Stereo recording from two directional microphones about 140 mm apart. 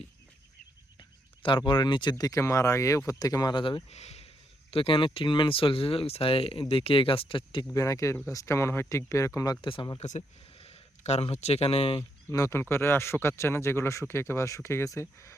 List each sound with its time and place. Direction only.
1.4 s speech: 35° left (ahead or behind)
7.7 s speech: 20° left (ahead or behind)
9.6 s speech: 40° left (ahead or behind)
10.0 s speech: 55° left (ahead or behind)
12.3 s speech: 20° left (ahead or behind)